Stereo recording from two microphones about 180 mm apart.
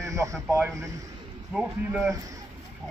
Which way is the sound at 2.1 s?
20° right (ahead or behind).